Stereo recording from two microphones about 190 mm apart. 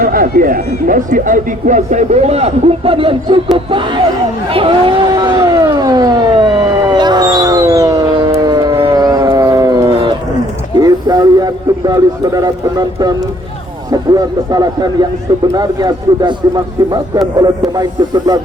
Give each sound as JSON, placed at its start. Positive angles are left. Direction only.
{"t": 0.0, "sound": "speech", "side_deg": -45}
{"t": 4.5, "sound": "a sound", "side_deg": -25}
{"t": 10.8, "sound": "speech", "side_deg": -20}
{"t": 17.3, "sound": "speech", "side_deg": -20}